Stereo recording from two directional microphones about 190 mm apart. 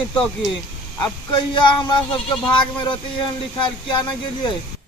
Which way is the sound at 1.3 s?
25° left (ahead or behind).